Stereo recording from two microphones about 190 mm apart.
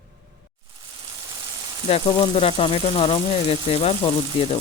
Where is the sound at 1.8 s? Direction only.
30° left (ahead or behind).